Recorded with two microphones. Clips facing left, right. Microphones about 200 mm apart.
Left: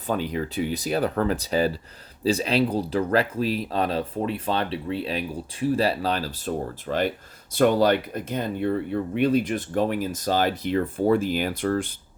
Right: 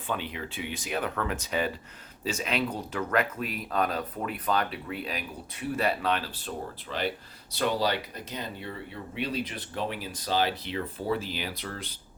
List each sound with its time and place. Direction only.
0.1 s speech: 40° left (ahead or behind)